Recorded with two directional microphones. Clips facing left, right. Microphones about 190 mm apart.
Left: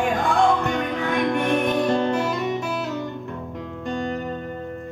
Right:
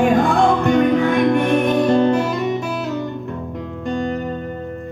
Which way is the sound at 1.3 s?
50° right (ahead or behind).